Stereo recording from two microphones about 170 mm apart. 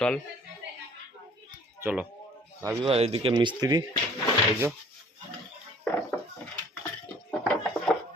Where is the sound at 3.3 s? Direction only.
25° right (ahead or behind).